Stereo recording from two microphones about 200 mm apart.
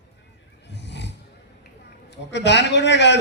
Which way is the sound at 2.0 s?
60° left (ahead or behind).